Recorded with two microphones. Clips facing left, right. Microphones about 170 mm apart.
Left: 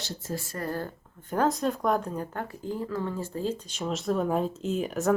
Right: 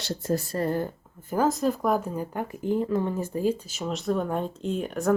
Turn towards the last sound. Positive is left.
turn(degrees=0)  # may be behind; listen again after turning